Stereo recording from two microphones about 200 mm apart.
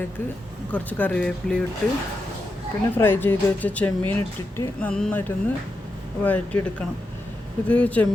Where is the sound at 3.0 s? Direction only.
10° left (ahead or behind).